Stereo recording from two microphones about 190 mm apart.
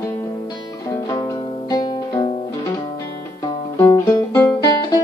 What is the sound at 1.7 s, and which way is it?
Music, 20° left (ahead or behind).